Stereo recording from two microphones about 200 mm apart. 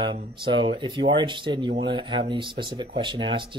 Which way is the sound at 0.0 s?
25° right (ahead or behind).